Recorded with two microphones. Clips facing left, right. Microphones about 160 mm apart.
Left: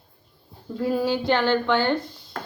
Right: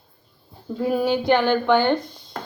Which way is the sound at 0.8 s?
20° right (ahead or behind).